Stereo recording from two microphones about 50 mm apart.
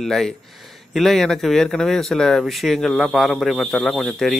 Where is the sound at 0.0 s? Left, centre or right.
Centre.